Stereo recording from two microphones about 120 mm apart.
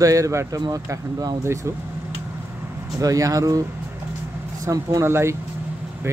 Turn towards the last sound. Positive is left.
turn(degrees=-20)  # may be behind; listen again after turning